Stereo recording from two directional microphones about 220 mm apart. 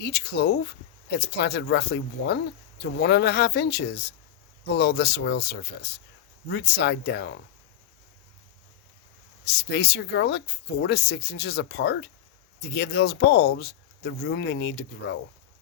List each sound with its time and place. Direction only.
0.0 s speech: 50° left (ahead or behind)
9.4 s speech: 50° left (ahead or behind)